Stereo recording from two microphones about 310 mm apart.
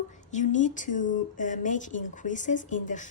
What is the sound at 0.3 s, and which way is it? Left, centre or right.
Speech, left.